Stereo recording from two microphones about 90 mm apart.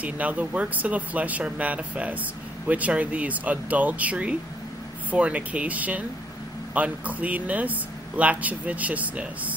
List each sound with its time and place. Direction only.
0.0 s speech: 15° right (ahead or behind)